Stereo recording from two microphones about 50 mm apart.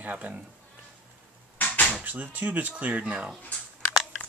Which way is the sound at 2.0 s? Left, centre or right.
Right.